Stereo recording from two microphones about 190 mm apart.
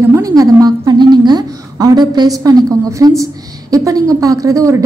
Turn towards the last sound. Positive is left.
turn(degrees=-15)  # may be behind; listen again after turning